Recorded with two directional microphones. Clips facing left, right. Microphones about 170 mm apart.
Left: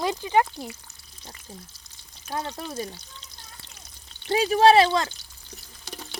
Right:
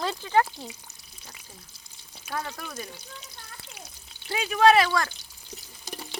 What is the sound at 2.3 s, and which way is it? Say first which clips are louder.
Speech: left 3 dB; 25° left (ahead or behind).